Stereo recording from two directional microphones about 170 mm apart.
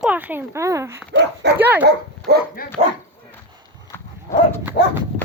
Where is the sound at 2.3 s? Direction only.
70° right (ahead or behind).